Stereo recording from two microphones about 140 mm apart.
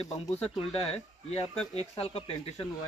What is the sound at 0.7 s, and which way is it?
Speech, 45° left (ahead or behind).